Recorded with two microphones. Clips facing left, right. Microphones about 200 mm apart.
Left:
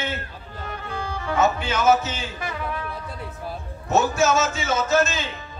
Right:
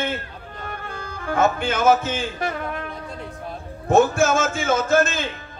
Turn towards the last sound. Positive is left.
turn(degrees=-50)  # may be behind; listen again after turning